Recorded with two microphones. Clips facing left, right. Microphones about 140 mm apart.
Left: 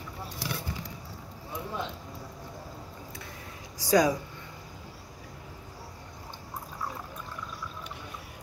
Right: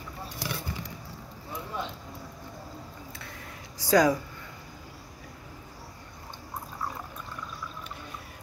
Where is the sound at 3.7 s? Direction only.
15° left (ahead or behind).